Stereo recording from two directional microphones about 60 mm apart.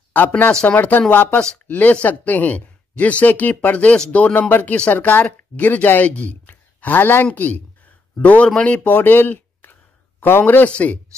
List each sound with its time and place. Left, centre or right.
0.1 s a woman's voice: left
8.9 s a woman's voice: left